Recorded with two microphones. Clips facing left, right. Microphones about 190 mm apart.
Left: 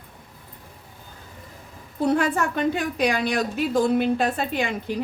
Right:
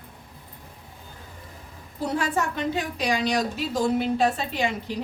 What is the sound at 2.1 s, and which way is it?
A woman's voice, 55° left (ahead or behind).